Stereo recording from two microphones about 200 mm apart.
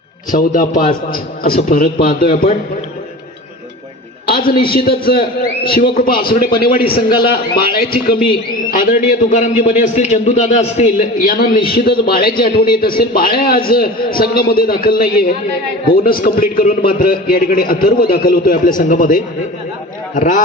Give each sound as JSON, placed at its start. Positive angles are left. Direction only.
{"t": 0.3, "sound": "a man's voice", "side_deg": 45}
{"t": 4.7, "sound": "a man's voice", "side_deg": 50}